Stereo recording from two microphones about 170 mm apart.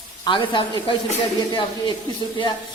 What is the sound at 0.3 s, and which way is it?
Speech, 25° left (ahead or behind).